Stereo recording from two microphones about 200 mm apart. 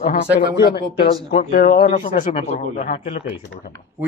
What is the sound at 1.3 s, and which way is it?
Speech, 40° left (ahead or behind).